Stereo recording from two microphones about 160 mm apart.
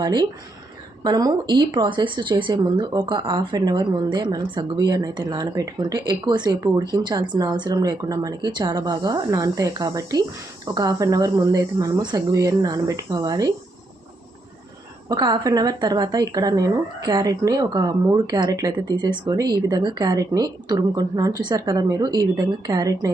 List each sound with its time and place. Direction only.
0.0 s speech: 25° right (ahead or behind)
15.1 s speech: 25° right (ahead or behind)